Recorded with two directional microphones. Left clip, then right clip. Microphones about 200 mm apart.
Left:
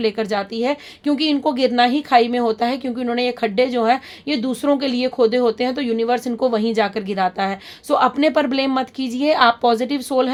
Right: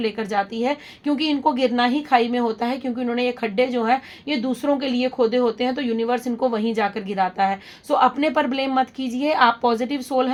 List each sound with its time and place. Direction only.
0.0 s a woman's voice: 40° left (ahead or behind)